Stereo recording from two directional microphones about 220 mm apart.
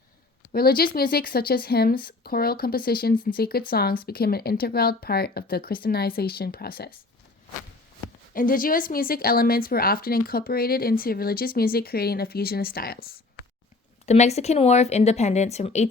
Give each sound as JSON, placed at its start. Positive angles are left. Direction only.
{"t": 0.5, "sound": "a woman's voice", "side_deg": 45}
{"t": 8.3, "sound": "a woman's voice", "side_deg": 40}
{"t": 14.1, "sound": "a woman's voice", "side_deg": 30}